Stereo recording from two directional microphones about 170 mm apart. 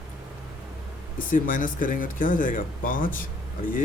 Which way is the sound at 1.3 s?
50° left (ahead or behind).